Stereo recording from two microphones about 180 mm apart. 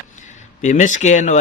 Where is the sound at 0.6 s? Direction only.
45° left (ahead or behind).